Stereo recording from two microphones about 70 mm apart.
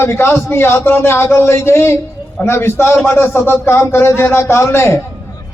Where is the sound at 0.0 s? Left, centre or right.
Left.